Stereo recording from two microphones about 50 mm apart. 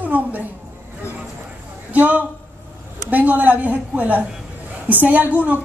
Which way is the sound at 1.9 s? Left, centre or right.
Right.